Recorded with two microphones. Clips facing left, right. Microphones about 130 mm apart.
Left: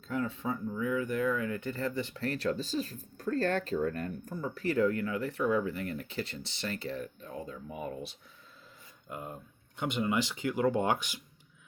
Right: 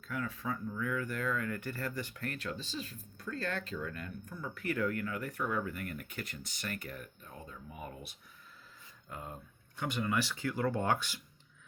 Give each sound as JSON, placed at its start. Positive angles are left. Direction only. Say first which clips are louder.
{"t": 0.1, "sound": "speech", "louder": "left 5 dB", "side_deg": 25}
{"t": 9.0, "sound": "speech", "louder": "left 4 dB", "side_deg": 15}